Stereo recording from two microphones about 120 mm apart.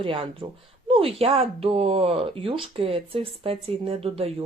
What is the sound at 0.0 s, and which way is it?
Speech, 45° right (ahead or behind).